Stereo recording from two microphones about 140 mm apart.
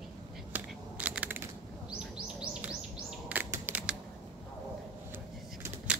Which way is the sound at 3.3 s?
15° right (ahead or behind).